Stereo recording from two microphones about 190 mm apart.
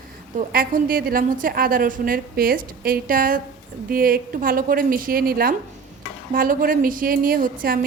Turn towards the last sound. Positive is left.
turn(degrees=-50)  # may be behind; listen again after turning